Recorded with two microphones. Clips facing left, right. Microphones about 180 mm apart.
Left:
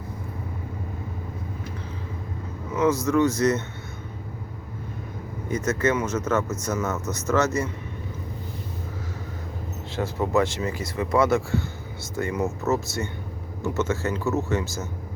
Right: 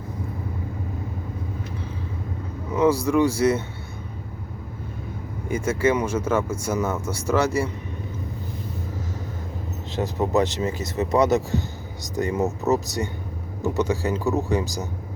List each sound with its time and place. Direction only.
2.7 s speech: 10° right (ahead or behind)
5.5 s speech: 10° right (ahead or behind)
9.9 s speech: 20° right (ahead or behind)